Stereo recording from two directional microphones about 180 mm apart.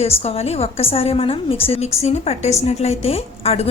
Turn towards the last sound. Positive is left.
turn(degrees=35)  # may be behind; listen again after turning